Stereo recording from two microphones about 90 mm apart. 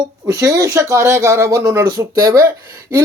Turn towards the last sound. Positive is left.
turn(degrees=-30)  # may be behind; listen again after turning